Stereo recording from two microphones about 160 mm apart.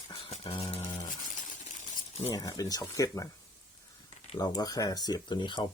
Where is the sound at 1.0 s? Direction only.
55° left (ahead or behind).